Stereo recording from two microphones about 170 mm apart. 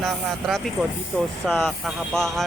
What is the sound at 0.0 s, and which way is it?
Speech, centre (ahead or behind).